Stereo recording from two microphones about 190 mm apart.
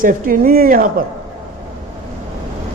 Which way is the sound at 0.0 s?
45° right (ahead or behind).